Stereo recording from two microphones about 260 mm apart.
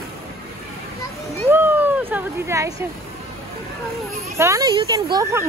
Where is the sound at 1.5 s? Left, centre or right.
Centre.